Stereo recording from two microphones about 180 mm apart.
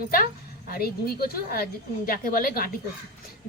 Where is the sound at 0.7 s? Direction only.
55° left (ahead or behind).